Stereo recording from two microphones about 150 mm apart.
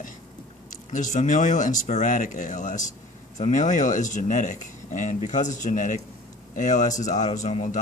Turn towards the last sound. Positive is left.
turn(degrees=50)  # may be behind; listen again after turning